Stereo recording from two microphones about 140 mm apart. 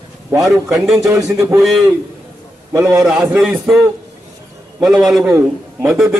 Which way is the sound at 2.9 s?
5° right (ahead or behind).